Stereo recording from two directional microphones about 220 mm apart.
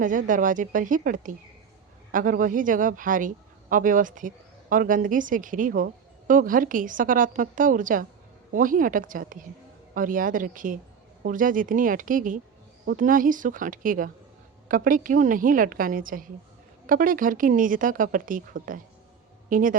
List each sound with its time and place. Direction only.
0.0 s speech: 35° right (ahead or behind)